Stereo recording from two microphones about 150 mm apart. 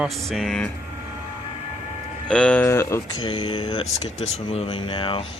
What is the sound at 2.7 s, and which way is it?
Speech, 20° left (ahead or behind).